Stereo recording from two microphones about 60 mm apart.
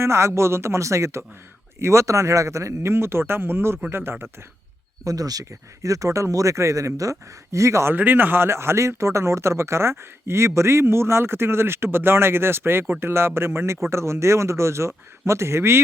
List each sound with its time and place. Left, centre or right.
0.0 s speech: right
2.9 s speech: right
5.0 s speech: right
7.9 s speech: right